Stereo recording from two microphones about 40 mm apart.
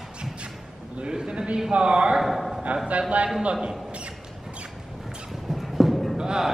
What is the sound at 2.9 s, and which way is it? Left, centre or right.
Speech, right.